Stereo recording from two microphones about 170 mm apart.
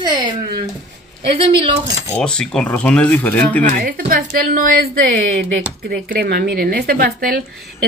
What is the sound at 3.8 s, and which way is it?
Speech, 60° right (ahead or behind).